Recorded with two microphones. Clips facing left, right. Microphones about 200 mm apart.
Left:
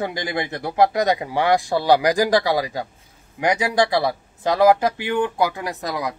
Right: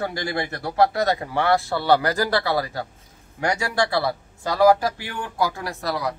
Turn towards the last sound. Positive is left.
turn(degrees=15)  # may be behind; listen again after turning